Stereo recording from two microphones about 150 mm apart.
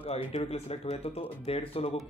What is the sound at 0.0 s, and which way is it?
Speech, 40° left (ahead or behind).